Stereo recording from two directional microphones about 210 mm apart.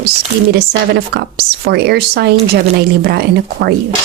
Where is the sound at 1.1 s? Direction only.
50° right (ahead or behind).